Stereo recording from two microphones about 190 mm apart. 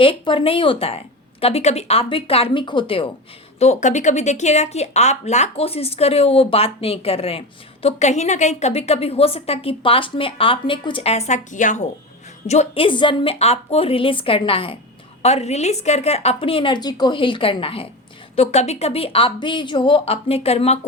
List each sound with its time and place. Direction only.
0.0 s speech: 30° left (ahead or behind)